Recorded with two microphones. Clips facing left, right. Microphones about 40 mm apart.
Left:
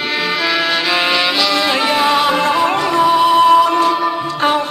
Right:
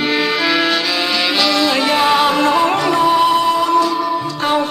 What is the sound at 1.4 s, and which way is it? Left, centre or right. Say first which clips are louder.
Music: even; centre.